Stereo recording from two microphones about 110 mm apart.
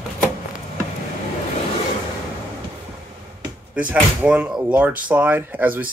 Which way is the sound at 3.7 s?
10° right (ahead or behind).